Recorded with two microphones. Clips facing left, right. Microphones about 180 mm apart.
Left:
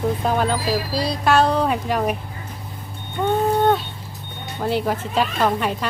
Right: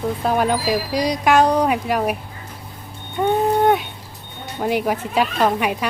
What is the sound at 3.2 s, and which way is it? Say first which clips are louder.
Livestock: right 1 dB; 15° right (ahead or behind).